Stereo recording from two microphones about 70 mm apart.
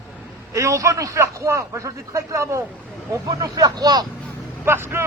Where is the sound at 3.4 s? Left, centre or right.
Right.